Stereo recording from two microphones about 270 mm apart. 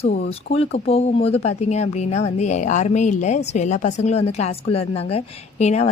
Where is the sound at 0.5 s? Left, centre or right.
Left.